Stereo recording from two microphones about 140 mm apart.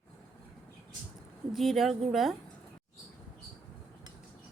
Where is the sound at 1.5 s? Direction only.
Centre (ahead or behind).